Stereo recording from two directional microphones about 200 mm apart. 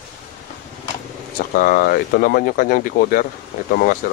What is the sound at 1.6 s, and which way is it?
Speech, 50° left (ahead or behind).